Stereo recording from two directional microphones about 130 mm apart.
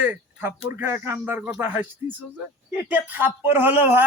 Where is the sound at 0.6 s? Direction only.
20° right (ahead or behind).